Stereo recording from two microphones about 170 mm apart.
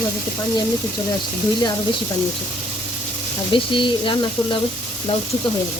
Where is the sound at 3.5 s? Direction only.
30° left (ahead or behind).